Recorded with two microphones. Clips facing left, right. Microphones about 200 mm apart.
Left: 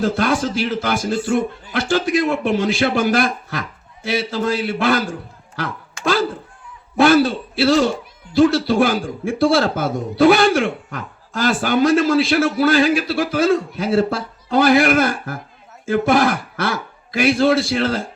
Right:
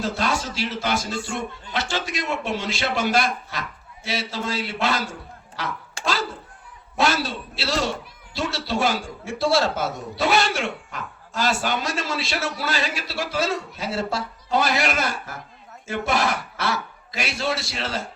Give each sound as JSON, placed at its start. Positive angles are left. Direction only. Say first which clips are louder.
{"t": 0.0, "sound": "a man's voice", "louder": "left 7 dB", "side_deg": 55}
{"t": 6.0, "sound": "a sound", "louder": "left 7 dB", "side_deg": -30}
{"t": 6.9, "sound": "a man's voice", "louder": "left 10 dB", "side_deg": 55}